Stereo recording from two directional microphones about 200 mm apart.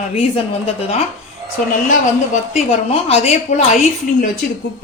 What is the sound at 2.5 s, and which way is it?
A woman's voice, 30° left (ahead or behind).